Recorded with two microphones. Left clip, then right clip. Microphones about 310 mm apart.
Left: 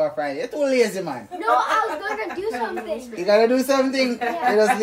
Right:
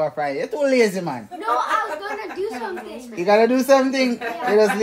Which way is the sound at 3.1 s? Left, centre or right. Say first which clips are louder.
Right 1 dB; right.